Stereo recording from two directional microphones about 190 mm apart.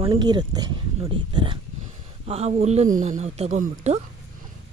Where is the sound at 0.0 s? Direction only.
25° right (ahead or behind).